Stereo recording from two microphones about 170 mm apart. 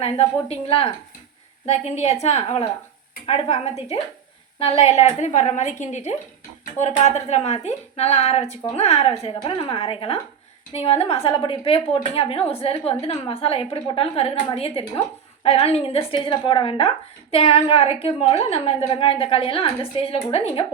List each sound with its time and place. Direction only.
0.0 s a woman's voice: 35° left (ahead or behind)